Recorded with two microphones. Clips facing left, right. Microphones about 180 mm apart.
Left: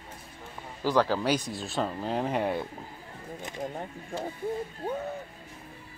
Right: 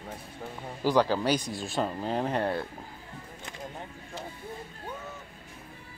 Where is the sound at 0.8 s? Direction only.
Centre (ahead or behind).